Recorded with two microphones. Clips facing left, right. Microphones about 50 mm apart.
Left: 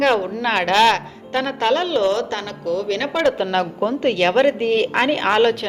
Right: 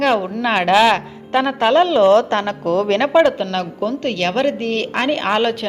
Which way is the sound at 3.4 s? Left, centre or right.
Centre.